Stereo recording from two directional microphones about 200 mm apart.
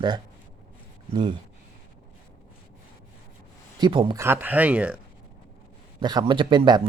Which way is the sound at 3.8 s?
25° right (ahead or behind).